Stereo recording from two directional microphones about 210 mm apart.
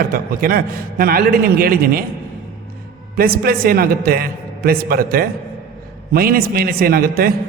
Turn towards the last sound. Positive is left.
turn(degrees=-45)  # may be behind; listen again after turning